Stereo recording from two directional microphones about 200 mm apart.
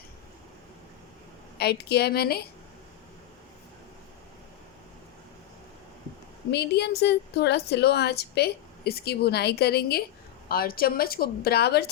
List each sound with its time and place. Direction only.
1.5 s speech: 55° left (ahead or behind)
6.5 s a woman's voice: 55° left (ahead or behind)